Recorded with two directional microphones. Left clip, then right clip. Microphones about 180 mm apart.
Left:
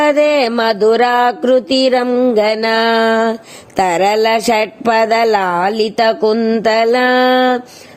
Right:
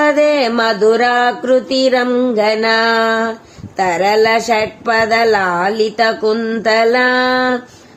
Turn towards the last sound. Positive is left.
turn(degrees=45)  # may be behind; listen again after turning